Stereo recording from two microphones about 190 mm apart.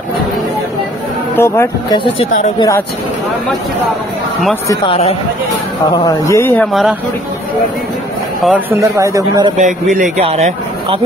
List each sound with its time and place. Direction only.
1.3 s speech: 15° left (ahead or behind)
6.0 s speech: 15° left (ahead or behind); by 7.0 s centre (ahead or behind)
8.5 s a man's voice: 10° right (ahead or behind)
9.6 s speech: 40° right (ahead or behind)